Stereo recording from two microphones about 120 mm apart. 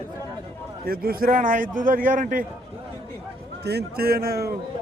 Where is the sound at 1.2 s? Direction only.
90° right.